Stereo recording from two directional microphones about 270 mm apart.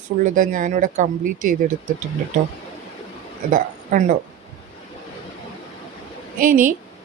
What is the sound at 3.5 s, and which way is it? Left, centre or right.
Speech, right.